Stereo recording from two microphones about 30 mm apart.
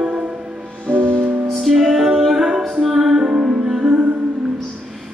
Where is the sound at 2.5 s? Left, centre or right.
Right.